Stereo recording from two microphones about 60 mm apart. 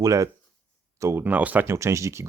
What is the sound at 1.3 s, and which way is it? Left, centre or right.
Speech, right.